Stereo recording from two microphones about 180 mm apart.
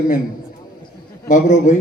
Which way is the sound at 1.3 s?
45° left (ahead or behind).